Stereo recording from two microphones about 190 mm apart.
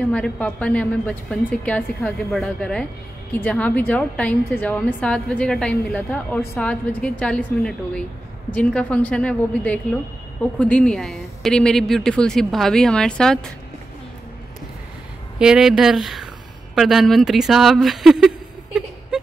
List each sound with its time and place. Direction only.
0.1 s a woman's voice: 5° left (ahead or behind)
15.3 s a woman's voice: 5° right (ahead or behind)